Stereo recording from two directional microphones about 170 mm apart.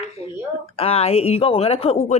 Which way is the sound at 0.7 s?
35° left (ahead or behind).